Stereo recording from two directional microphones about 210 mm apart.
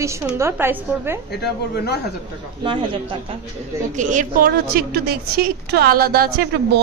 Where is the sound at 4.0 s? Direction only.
35° right (ahead or behind).